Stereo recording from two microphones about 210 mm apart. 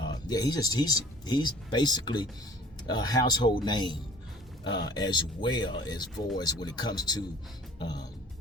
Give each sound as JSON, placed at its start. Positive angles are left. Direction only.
{"t": 0.0, "sound": "speech", "side_deg": 20}
{"t": 7.8, "sound": "music", "side_deg": 20}